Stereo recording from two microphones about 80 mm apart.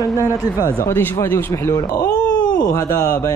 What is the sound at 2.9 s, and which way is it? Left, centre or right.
Speech, left.